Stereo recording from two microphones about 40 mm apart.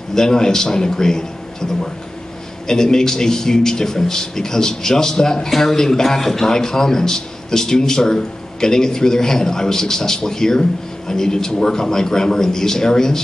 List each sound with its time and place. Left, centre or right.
0.1 s a man's voice: centre